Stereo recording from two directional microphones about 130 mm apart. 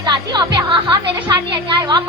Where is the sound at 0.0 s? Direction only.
30° right (ahead or behind).